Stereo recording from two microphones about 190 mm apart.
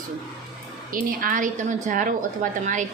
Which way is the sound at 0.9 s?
45° right (ahead or behind).